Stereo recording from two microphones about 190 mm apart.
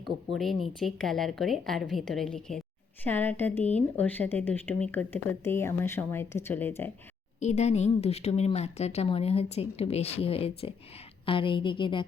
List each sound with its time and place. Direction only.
0.3 s a woman's voice: centre (ahead or behind)
7.3 s a woman's voice: 40° left (ahead or behind)